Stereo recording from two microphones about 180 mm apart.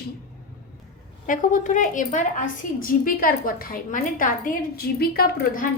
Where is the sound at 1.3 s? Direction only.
45° left (ahead or behind).